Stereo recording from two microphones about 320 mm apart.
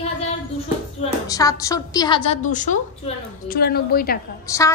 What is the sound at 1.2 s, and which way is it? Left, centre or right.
A woman's voice, centre.